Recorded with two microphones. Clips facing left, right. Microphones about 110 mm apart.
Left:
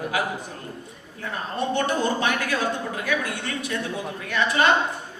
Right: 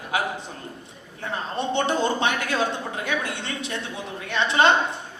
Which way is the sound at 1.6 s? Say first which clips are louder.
Even; 25° right (ahead or behind).